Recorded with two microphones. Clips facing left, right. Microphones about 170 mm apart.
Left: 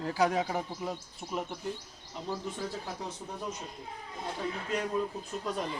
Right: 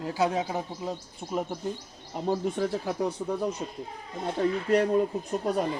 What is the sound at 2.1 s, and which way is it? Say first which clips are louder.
Speech: right 9 dB; 55° right (ahead or behind).